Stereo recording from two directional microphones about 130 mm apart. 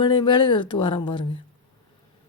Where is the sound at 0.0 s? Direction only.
35° left (ahead or behind).